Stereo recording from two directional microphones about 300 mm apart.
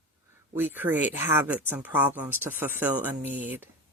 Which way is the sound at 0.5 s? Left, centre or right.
Centre.